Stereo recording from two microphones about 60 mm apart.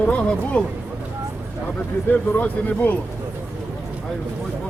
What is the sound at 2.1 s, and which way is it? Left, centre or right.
Speech, left.